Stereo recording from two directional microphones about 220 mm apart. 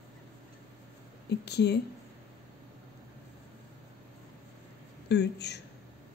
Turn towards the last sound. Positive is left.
turn(degrees=50)  # may be behind; listen again after turning